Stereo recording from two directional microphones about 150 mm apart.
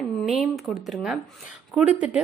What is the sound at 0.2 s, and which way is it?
A woman's voice, 5° right (ahead or behind).